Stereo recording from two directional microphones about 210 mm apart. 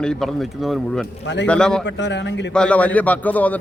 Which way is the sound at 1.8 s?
55° left (ahead or behind).